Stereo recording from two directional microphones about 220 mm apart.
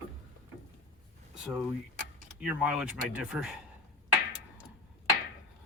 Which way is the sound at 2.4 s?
5° right (ahead or behind).